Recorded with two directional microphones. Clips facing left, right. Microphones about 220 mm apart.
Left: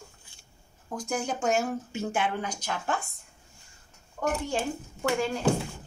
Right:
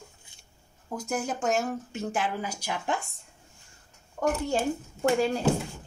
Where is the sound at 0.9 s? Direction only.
5° right (ahead or behind).